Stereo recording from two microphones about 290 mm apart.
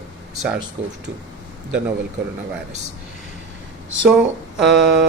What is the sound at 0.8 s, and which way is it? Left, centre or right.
Speech, centre.